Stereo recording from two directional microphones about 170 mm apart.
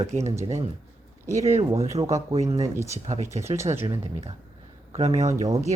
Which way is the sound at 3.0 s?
40° right (ahead or behind).